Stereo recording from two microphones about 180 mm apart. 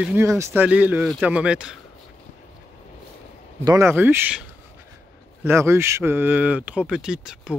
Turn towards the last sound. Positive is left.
turn(degrees=-5)  # may be behind; listen again after turning